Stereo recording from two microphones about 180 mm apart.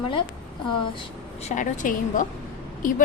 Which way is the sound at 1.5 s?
45° left (ahead or behind).